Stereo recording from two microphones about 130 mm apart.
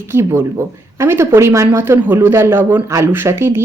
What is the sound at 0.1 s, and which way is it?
Speech, 20° right (ahead or behind).